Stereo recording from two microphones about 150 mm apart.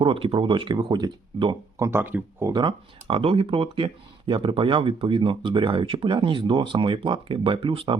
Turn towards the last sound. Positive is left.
turn(degrees=-35)  # may be behind; listen again after turning